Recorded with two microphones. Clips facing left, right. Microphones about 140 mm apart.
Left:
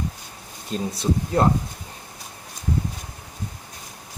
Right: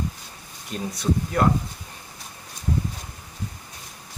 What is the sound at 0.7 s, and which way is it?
Speech, 30° left (ahead or behind).